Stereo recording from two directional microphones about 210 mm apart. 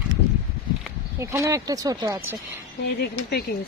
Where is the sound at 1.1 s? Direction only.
15° right (ahead or behind).